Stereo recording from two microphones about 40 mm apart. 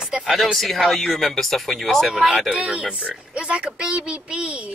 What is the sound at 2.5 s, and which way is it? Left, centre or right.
A woman's voice, right.